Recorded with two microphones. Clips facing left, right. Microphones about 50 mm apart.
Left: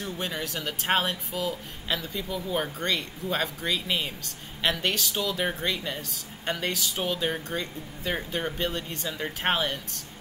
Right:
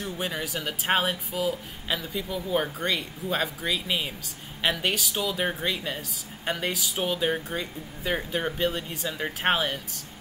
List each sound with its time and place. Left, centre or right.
0.0 s speech: centre